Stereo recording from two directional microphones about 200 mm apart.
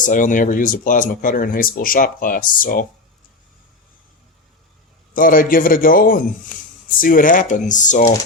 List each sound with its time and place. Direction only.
0.0 s speech: 40° left (ahead or behind)
5.1 s speech: 45° left (ahead or behind)